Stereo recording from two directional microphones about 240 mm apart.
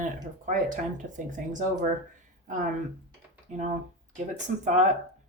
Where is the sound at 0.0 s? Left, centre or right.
Right.